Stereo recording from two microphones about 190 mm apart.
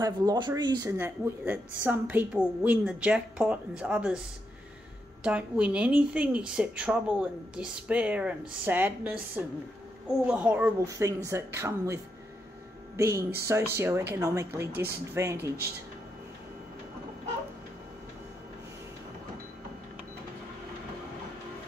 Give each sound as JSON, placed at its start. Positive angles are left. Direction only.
{"t": 0.0, "sound": "speech", "side_deg": -20}
{"t": 5.2, "sound": "speech", "side_deg": -5}
{"t": 10.2, "sound": "speech", "side_deg": -10}